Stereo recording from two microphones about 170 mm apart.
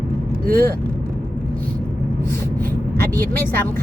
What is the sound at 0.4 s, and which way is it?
Speech, 60° right (ahead or behind).